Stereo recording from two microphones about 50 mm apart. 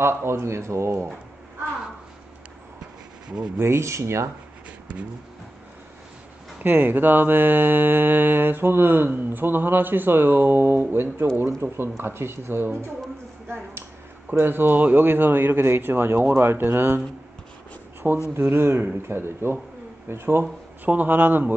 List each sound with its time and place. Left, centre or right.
0.0 s speech: right
3.3 s speech: right
3.6 s speech: right
6.6 s mantra: right
14.5 s mantra: right
18.3 s mantra: right
19.0 s speech: right
20.8 s a man's voice: right